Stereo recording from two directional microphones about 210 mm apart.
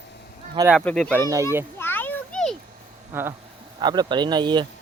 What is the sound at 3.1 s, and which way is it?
Speech, 10° right (ahead or behind).